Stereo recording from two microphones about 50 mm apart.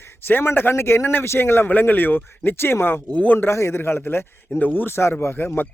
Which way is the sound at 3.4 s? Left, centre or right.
Left.